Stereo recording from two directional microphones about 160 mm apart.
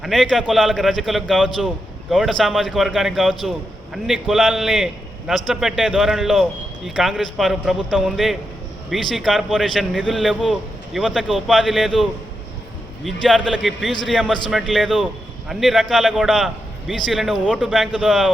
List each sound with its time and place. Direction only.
0.0 s speech: centre (ahead or behind)
13.2 s speech: 5° left (ahead or behind)